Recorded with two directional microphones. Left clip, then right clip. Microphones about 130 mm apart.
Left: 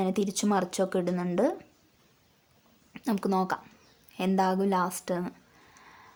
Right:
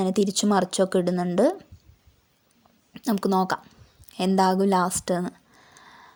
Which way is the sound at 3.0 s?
30° right (ahead or behind).